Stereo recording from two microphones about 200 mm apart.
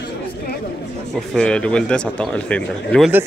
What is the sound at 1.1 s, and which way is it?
Speech, 5° left (ahead or behind).